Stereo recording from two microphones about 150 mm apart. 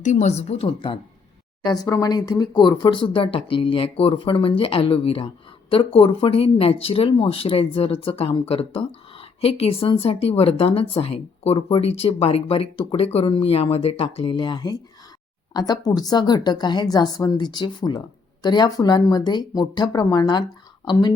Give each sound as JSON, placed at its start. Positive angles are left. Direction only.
{"t": 0.0, "sound": "a woman's voice", "side_deg": 55}
{"t": 1.6, "sound": "a woman's voice", "side_deg": 25}